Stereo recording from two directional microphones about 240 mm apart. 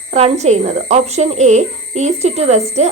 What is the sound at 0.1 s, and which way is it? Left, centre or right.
Speech, right.